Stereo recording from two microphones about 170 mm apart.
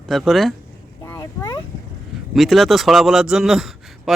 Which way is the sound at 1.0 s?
20° left (ahead or behind).